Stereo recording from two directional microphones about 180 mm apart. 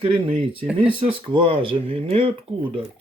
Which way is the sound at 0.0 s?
30° right (ahead or behind).